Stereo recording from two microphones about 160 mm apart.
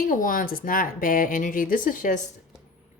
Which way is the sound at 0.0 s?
55° left (ahead or behind).